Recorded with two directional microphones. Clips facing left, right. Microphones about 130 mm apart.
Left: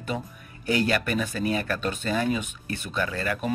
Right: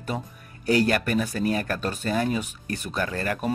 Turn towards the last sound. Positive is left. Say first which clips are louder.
# right 1 dB
turn(degrees=-45)  # may be behind; listen again after turning